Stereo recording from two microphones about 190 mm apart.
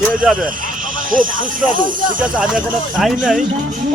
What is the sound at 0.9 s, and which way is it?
Music, 45° right (ahead or behind).